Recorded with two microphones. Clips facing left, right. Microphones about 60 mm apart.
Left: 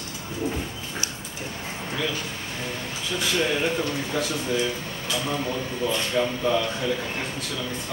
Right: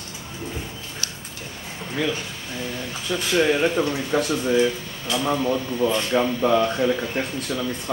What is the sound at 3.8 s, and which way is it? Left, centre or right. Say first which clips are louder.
Speech: right 5 dB; right.